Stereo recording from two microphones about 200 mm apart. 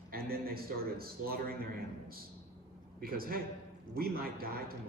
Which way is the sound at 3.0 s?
45° right (ahead or behind).